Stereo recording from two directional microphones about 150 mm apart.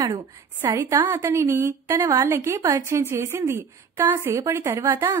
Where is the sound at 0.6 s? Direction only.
20° right (ahead or behind).